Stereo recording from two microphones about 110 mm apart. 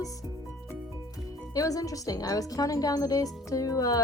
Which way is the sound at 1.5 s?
30° left (ahead or behind).